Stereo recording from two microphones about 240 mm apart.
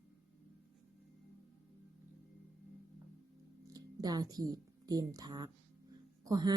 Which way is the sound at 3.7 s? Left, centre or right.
Centre.